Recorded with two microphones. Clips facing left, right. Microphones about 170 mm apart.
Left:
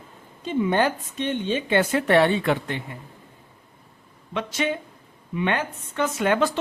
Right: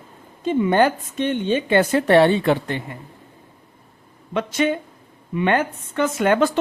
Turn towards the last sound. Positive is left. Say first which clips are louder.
# right 4 dB
turn(degrees=-50)  # may be behind; listen again after turning